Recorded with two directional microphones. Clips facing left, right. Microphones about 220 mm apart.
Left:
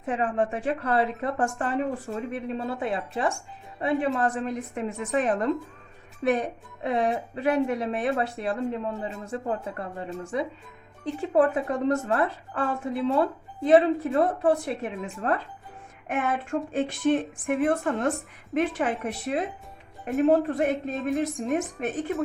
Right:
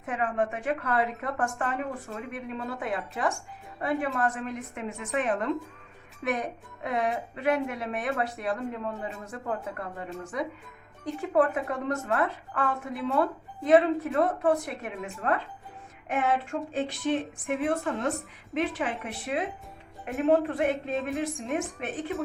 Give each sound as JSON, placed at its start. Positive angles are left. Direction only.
{"t": 0.0, "sound": "a woman's voice", "side_deg": 30}
{"t": 16.0, "sound": "speech", "side_deg": 50}
{"t": 20.6, "sound": "a woman's voice", "side_deg": 40}